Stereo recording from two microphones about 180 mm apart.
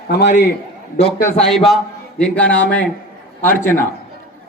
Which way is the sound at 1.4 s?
Centre (ahead or behind).